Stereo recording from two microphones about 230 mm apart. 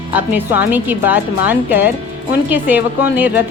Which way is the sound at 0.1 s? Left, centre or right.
Centre.